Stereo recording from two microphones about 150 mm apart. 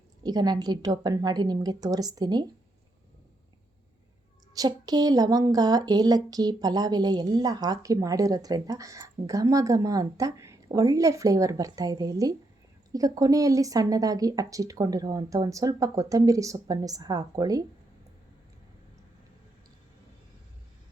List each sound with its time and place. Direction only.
0.2 s a woman's voice: 25° right (ahead or behind)
4.5 s a woman's voice: 25° right (ahead or behind)